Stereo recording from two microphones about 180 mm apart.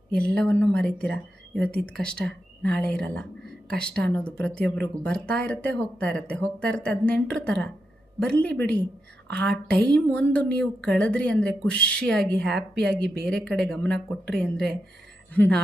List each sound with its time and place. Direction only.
0.1 s speech: 60° right (ahead or behind)
0.3 s a woman's voice: 5° left (ahead or behind)